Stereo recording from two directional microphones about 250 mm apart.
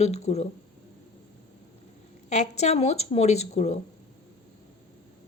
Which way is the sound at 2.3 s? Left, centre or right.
Left.